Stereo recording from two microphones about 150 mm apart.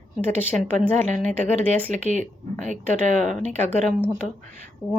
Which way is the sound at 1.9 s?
55° right (ahead or behind).